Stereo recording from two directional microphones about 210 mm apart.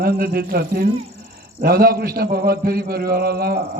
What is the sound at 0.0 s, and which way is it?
A man's voice, 45° right (ahead or behind).